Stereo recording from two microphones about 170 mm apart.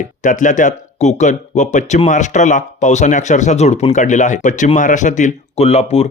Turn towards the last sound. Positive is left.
turn(degrees=40)  # may be behind; listen again after turning